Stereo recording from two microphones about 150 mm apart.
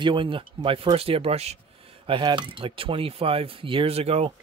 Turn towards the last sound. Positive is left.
turn(degrees=-40)  # may be behind; listen again after turning